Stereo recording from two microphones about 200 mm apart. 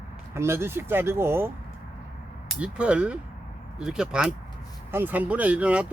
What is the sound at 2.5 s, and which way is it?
Speech, 5° right (ahead or behind).